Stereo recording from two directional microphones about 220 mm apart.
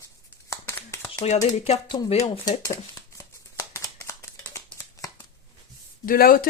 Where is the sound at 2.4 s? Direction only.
15° left (ahead or behind).